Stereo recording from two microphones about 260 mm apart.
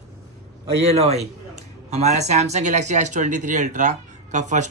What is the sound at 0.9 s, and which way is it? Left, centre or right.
Speech, right.